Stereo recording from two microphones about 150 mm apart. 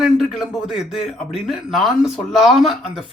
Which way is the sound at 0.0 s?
5° right (ahead or behind).